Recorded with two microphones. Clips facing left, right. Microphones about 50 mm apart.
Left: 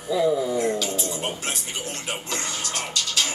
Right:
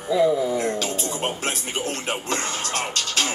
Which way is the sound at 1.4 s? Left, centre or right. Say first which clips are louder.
Right 4 dB; right.